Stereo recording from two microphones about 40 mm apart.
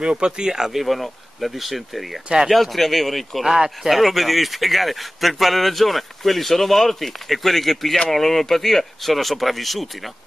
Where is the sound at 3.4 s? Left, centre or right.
Centre.